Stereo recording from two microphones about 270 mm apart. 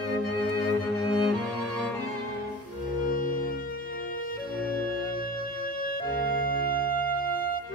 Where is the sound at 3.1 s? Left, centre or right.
Left.